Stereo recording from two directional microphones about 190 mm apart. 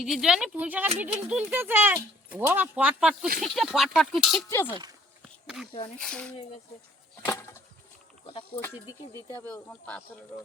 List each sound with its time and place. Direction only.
0.0 s speech: 5° right (ahead or behind)
4.4 s speech: 15° left (ahead or behind)
6.0 s speech: 5° left (ahead or behind)
7.3 s a sound: 15° left (ahead or behind)
8.3 s speech: 30° left (ahead or behind)
9.3 s speech: 10° left (ahead or behind)